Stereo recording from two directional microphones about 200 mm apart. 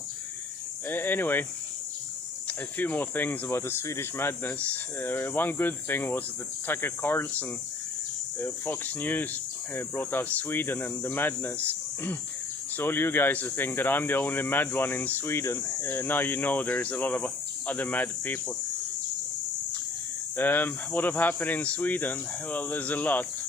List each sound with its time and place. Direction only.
0.9 s speech: 10° left (ahead or behind)
2.5 s speech: 10° left (ahead or behind)
20.3 s speech: 10° left (ahead or behind)